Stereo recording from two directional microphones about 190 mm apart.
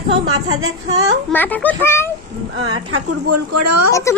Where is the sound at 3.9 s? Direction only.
15° left (ahead or behind).